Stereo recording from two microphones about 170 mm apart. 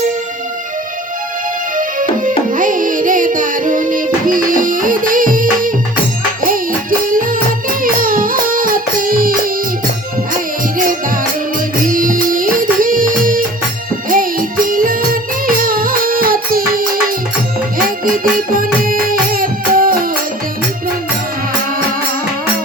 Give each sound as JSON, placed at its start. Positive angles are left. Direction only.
{"t": 1.7, "sound": "music", "side_deg": -50}
{"t": 7.1, "sound": "music", "side_deg": -55}
{"t": 10.8, "sound": "music", "side_deg": -55}